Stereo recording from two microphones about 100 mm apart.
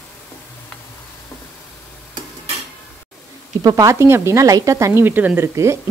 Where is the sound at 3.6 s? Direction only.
35° right (ahead or behind).